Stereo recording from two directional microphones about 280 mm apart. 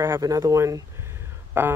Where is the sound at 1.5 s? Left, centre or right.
Centre.